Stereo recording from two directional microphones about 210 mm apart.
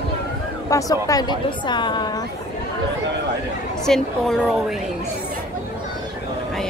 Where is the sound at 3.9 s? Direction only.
Centre (ahead or behind).